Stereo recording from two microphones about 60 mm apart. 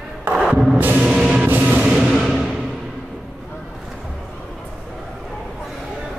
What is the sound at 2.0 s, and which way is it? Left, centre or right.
Music, centre.